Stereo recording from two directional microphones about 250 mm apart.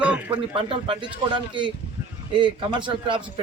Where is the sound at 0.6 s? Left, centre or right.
Right.